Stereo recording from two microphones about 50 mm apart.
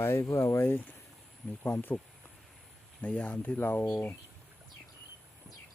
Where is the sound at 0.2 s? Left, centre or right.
Left.